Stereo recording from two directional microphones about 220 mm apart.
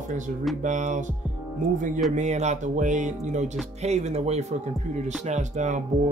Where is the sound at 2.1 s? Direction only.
30° right (ahead or behind).